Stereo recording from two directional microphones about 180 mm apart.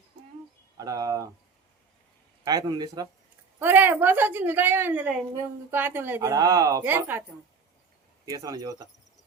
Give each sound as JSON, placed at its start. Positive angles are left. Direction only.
{"t": 0.8, "sound": "speech", "side_deg": -20}
{"t": 2.4, "sound": "speech", "side_deg": -20}
{"t": 3.6, "sound": "a woman's voice", "side_deg": -10}